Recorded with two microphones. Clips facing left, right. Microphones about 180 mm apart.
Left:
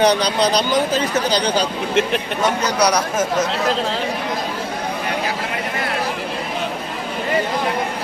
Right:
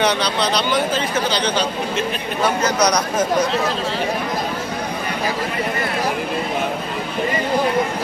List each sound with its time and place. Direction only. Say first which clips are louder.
0.0 s speech: left 3 dB; 40° left (ahead or behind)
2.9 s speech: even; 5° left (ahead or behind)